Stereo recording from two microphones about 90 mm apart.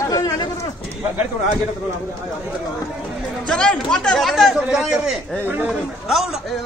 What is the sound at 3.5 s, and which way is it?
A man's voice, 10° left (ahead or behind).